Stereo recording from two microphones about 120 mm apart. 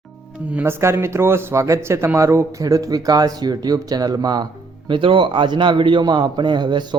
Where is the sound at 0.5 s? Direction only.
20° right (ahead or behind); by 4.4 s 35° right (ahead or behind).